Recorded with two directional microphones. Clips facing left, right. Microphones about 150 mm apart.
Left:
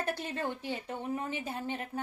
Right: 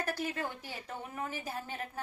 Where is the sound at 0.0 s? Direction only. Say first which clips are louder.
Left 1 dB; 25° left (ahead or behind).